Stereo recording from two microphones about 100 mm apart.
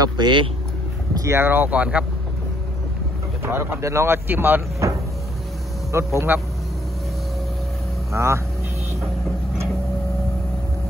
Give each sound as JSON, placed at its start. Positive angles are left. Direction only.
{"t": 0.0, "sound": "speech", "side_deg": -50}
{"t": 1.1, "sound": "speech", "side_deg": -30}
{"t": 3.4, "sound": "speech", "side_deg": -25}
{"t": 8.1, "sound": "speech", "side_deg": -30}